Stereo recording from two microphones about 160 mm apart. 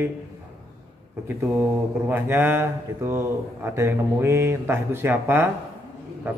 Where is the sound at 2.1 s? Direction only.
15° right (ahead or behind).